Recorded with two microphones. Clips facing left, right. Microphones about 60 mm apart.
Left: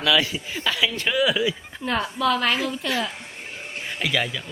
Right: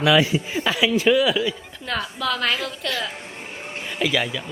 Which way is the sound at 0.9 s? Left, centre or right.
Centre.